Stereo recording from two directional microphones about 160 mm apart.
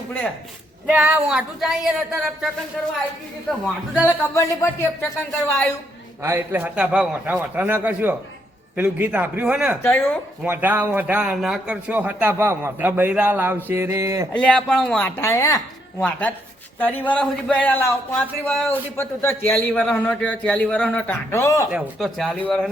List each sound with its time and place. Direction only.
0.9 s speech: 10° right (ahead or behind)
4.2 s speech: 15° left (ahead or behind)
6.2 s a man's voice: 15° right (ahead or behind)
9.8 s speech: 10° left (ahead or behind)
10.4 s a man's voice: 10° right (ahead or behind)
13.7 s a sound: 15° right (ahead or behind)
14.3 s speech: 5° left (ahead or behind)
21.7 s speech: 5° right (ahead or behind)